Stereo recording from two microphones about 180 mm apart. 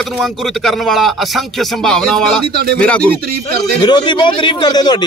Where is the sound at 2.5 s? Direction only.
60° right (ahead or behind).